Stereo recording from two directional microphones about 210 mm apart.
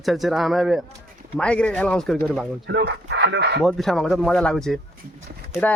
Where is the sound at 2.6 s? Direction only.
55° right (ahead or behind).